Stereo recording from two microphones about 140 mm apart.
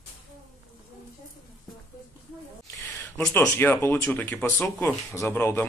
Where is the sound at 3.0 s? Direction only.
15° left (ahead or behind).